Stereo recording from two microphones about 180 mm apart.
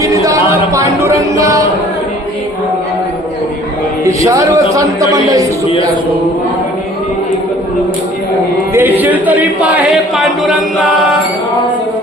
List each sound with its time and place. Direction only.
0.0 s music: 20° right (ahead or behind)
4.0 s speech: 20° right (ahead or behind)
8.7 s speech: 10° right (ahead or behind)